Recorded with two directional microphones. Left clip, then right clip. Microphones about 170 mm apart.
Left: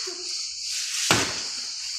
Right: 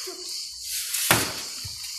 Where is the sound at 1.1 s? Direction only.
25° right (ahead or behind).